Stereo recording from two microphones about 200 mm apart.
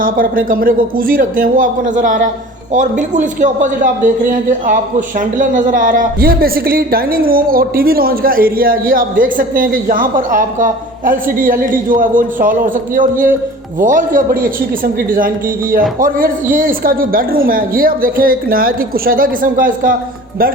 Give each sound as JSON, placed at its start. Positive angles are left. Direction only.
{"t": 0.0, "sound": "a man's voice", "side_deg": -45}